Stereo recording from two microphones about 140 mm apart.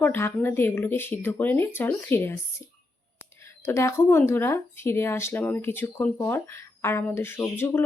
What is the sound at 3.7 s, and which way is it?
Speech, 20° left (ahead or behind).